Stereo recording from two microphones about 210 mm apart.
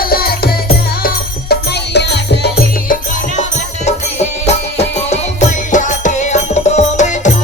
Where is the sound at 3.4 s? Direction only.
30° left (ahead or behind).